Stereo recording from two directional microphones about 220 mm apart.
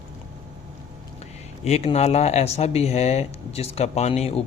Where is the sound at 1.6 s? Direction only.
30° left (ahead or behind).